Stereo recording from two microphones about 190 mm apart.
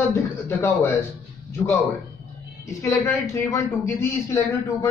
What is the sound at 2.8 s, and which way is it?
A man's voice, 15° left (ahead or behind).